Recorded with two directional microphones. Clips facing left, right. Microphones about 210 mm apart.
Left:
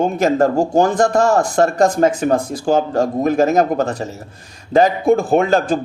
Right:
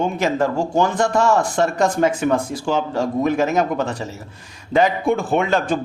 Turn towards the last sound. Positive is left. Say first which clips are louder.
# left 4 dB
turn(degrees=40)  # may be behind; listen again after turning